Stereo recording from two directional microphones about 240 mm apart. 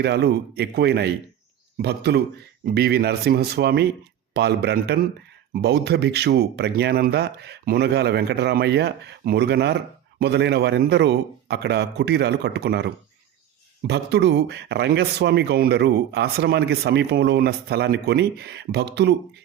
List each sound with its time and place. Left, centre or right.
0.0 s speech: right